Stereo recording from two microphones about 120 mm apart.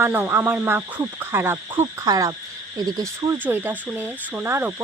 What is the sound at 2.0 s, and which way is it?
Speech, 30° right (ahead or behind).